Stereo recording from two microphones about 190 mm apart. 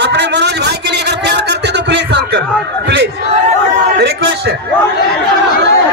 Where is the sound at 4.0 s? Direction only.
65° right (ahead or behind).